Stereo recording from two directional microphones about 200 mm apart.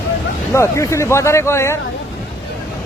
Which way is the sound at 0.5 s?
15° left (ahead or behind).